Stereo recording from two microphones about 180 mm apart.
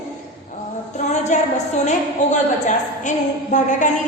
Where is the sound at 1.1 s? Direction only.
40° left (ahead or behind).